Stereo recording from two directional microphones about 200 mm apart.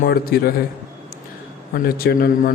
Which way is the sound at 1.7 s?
50° left (ahead or behind).